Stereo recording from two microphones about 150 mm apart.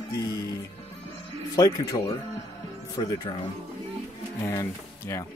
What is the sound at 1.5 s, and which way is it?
Speech, 25° left (ahead or behind).